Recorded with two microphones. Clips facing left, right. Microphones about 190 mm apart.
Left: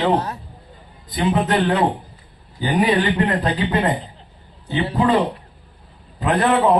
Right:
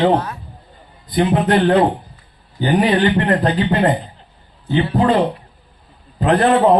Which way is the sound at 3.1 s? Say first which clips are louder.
Right 4 dB; 45° right (ahead or behind).